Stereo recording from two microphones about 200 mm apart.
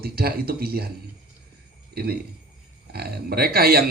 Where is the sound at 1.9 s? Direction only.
50° right (ahead or behind).